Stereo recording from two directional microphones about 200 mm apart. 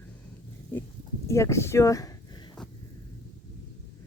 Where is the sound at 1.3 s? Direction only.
15° left (ahead or behind).